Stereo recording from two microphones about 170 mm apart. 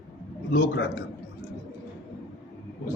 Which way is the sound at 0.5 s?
75° left (ahead or behind).